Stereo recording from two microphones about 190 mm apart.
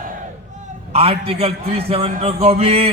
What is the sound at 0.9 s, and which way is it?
A man's voice, 30° right (ahead or behind).